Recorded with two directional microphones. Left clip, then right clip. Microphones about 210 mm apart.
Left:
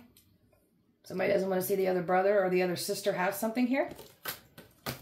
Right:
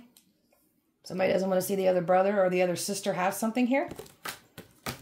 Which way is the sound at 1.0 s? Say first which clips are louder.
Right 2 dB; 40° right (ahead or behind).